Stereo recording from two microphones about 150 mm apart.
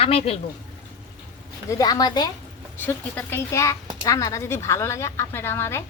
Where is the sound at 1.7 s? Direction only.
25° left (ahead or behind).